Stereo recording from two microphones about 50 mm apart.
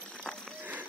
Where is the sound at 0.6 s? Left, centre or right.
Right.